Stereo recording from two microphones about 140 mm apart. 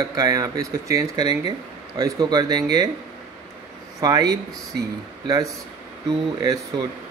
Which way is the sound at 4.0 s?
25° right (ahead or behind).